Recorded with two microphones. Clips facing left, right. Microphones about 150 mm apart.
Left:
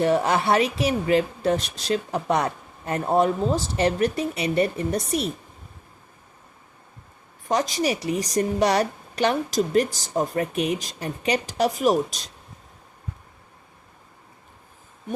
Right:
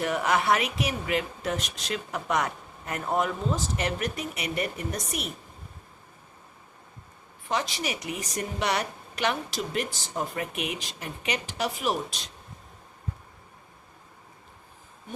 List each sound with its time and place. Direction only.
0.0 s a woman's voice: 30° left (ahead or behind)
7.4 s a woman's voice: 40° left (ahead or behind)